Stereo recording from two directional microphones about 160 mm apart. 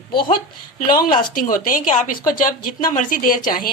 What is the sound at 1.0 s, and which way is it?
Speech, 25° left (ahead or behind).